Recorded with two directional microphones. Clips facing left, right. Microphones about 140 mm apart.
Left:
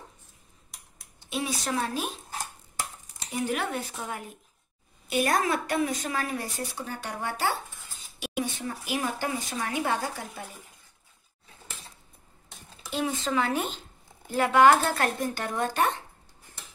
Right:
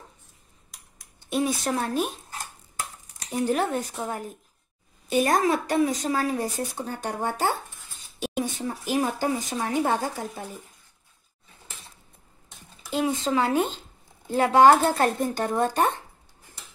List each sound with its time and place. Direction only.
1.3 s speech: 50° right (ahead or behind)
3.3 s speech: 40° right (ahead or behind)
12.9 s speech: 30° right (ahead or behind)